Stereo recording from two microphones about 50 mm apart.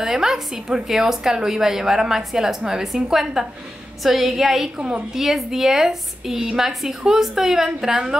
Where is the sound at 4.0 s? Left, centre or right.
Centre.